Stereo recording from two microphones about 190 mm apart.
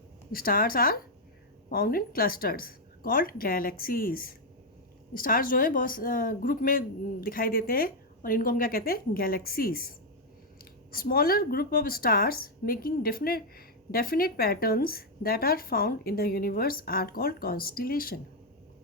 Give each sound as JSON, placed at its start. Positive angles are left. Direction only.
{"t": 0.3, "sound": "a woman's voice", "side_deg": 50}
{"t": 10.9, "sound": "a woman's voice", "side_deg": 50}